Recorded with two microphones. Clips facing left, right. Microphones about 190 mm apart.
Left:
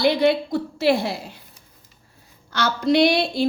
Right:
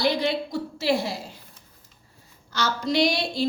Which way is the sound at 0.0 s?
60° left (ahead or behind).